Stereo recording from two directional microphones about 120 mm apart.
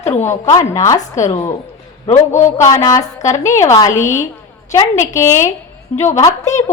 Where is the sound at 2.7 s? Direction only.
25° left (ahead or behind).